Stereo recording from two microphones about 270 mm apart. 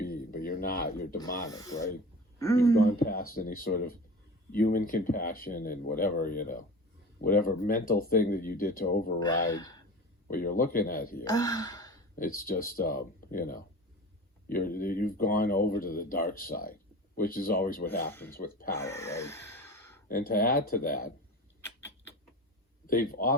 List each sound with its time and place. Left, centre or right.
0.0 s a sound: left
1.5 s speech: centre
2.8 s speech: left
9.1 s speech: centre
10.2 s speech: left
11.2 s speech: centre
12.1 s speech: left
18.1 s speech: centre
18.3 s speech: left
18.7 s sigh: centre
20.1 s speech: left
21.6 s rodents: centre
22.9 s speech: left